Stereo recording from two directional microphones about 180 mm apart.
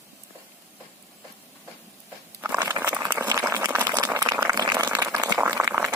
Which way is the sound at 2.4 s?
10° right (ahead or behind).